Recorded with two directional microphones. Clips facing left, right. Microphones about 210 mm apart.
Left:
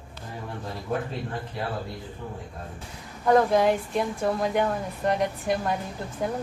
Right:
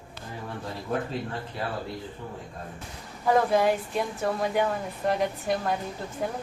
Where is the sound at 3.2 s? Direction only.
5° right (ahead or behind).